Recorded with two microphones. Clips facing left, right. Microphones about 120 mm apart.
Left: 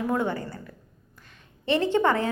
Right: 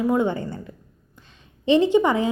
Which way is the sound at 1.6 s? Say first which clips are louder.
Right 5 dB; 15° right (ahead or behind).